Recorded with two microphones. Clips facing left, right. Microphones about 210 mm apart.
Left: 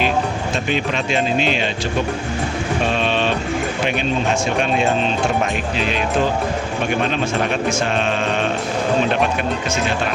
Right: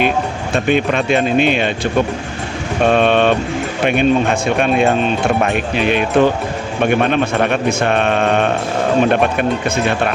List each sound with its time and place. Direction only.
0.5 s a man's voice: 55° right (ahead or behind)
2.8 s a man's voice: 55° right (ahead or behind)